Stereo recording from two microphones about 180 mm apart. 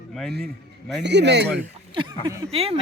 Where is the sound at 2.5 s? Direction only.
35° right (ahead or behind).